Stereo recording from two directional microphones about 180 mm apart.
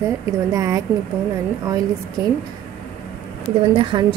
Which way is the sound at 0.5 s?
20° right (ahead or behind).